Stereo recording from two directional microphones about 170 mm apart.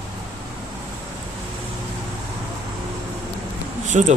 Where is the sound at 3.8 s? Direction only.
45° right (ahead or behind).